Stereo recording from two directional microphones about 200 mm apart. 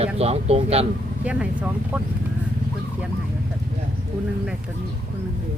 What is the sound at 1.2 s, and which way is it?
Speech, 5° right (ahead or behind).